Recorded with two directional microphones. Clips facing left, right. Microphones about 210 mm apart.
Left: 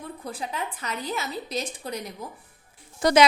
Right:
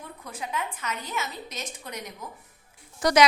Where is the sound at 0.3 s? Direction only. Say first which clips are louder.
Even; 35° left (ahead or behind).